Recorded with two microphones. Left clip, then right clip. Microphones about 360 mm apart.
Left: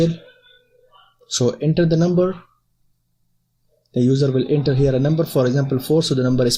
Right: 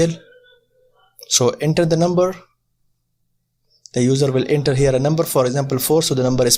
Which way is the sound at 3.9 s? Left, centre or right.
Centre.